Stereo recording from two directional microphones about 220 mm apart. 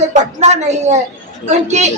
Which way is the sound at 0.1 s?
30° right (ahead or behind).